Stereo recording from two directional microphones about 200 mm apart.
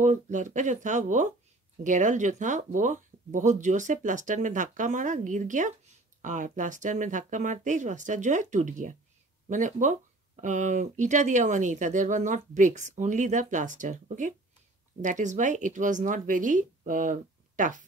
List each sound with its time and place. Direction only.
0.0 s speech: 40° right (ahead or behind)